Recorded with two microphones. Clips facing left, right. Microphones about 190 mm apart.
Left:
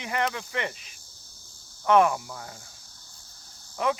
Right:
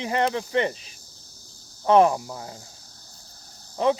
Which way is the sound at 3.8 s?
30° right (ahead or behind).